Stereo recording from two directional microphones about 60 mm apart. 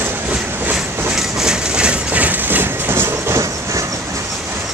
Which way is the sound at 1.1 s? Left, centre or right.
Centre.